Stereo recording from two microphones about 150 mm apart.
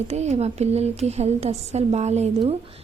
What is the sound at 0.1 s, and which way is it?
A woman's voice, 45° right (ahead or behind).